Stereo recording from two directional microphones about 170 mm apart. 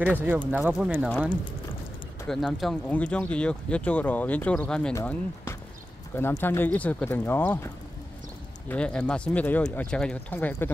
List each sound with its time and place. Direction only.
0.0 s speech: 10° right (ahead or behind)
2.2 s speech: centre (ahead or behind)
4.9 s speech: 15° left (ahead or behind)